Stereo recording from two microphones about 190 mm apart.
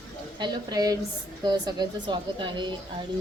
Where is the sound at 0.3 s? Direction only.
20° right (ahead or behind).